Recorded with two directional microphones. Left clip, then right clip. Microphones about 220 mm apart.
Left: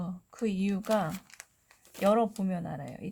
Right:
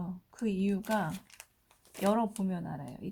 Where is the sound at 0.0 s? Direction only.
40° left (ahead or behind).